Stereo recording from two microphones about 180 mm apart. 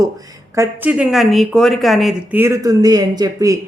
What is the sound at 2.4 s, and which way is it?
Speech, 15° right (ahead or behind).